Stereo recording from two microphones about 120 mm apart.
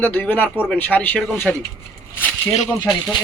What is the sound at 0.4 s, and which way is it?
Speech, 10° right (ahead or behind).